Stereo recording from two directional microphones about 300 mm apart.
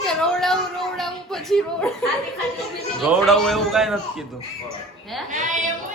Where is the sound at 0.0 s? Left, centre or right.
Centre.